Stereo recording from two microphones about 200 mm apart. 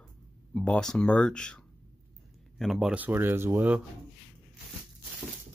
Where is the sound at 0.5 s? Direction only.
5° left (ahead or behind); by 3.8 s 10° right (ahead or behind).